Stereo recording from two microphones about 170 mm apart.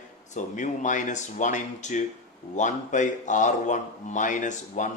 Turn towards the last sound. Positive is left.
turn(degrees=45)  # may be behind; listen again after turning